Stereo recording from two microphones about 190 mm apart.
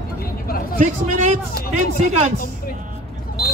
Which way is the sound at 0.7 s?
40° right (ahead or behind).